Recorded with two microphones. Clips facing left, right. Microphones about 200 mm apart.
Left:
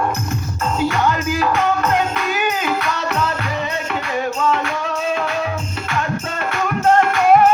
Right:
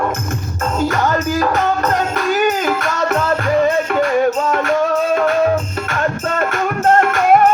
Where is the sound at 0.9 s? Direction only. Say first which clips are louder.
Right 2 dB; 45° right (ahead or behind).